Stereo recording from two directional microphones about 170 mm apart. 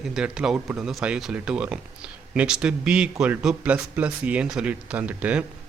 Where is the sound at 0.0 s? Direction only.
5° right (ahead or behind).